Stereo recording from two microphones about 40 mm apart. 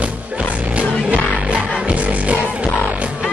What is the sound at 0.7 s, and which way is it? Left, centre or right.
Music, right.